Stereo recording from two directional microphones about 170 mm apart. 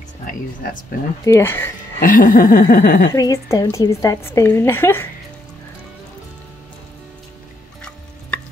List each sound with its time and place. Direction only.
1.2 s speech: 15° left (ahead or behind)
2.0 s a sound: 55° left (ahead or behind)
3.2 s speech: 20° left (ahead or behind)